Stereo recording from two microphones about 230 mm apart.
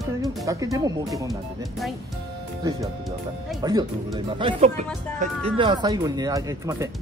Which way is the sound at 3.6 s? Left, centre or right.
Centre.